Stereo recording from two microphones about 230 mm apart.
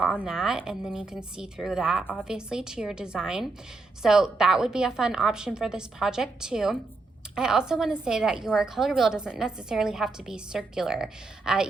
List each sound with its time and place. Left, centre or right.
0.0 s a woman's voice: centre